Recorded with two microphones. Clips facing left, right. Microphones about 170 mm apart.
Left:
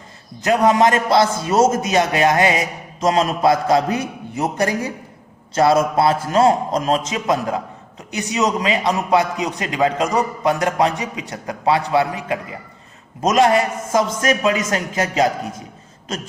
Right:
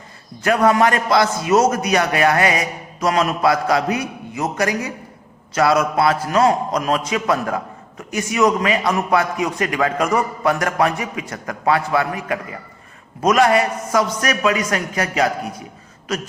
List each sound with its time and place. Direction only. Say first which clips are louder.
0.4 s a man's voice: left 1 dB; 20° left (ahead or behind)